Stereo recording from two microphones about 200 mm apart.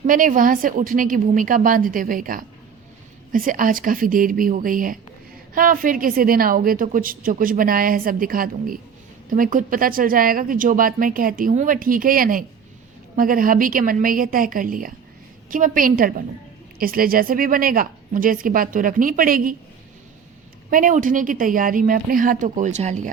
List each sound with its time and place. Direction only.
0.1 s a woman's voice: 40° right (ahead or behind)
20.7 s a woman's voice: 40° right (ahead or behind)